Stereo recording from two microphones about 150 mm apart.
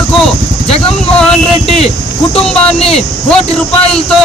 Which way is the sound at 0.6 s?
40° left (ahead or behind).